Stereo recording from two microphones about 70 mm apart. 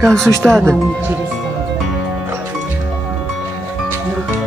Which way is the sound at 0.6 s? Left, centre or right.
Right.